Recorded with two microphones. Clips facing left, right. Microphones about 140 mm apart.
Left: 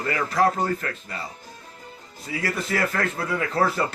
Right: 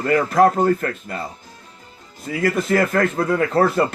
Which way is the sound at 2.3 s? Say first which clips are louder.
Right 8 dB; 50° right (ahead or behind).